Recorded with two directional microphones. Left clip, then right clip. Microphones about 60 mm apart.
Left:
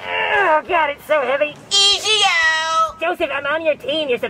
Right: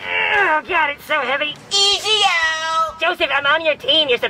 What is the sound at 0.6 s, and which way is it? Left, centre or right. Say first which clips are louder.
Speech: left 1 dB; right.